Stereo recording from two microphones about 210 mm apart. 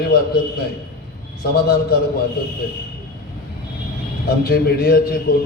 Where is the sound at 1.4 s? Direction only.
45° left (ahead or behind).